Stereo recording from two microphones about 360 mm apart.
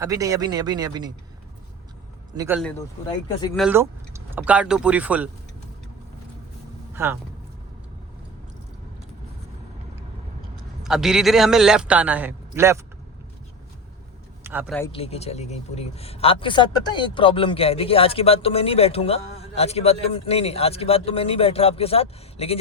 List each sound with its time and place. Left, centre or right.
0.0 s speech: centre
2.3 s a man's voice: centre
6.9 s speech: centre
10.8 s a man's voice: centre
14.4 s speech: centre
14.8 s speech: centre